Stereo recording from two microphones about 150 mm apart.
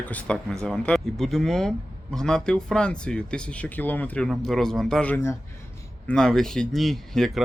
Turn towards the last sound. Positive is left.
turn(degrees=0)  # may be behind; listen again after turning